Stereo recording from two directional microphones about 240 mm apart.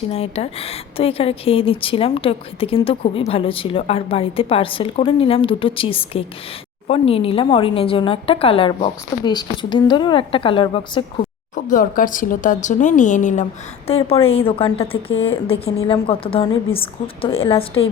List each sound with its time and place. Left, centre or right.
0.1 s a woman's voice: left
11.5 s a woman's voice: left